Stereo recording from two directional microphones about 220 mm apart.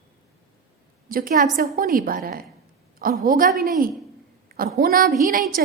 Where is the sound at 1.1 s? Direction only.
40° right (ahead or behind).